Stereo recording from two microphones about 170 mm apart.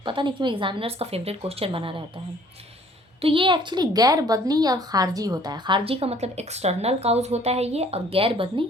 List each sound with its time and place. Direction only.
0.0 s a woman's voice: 30° right (ahead or behind)
3.2 s a woman's voice: 30° right (ahead or behind)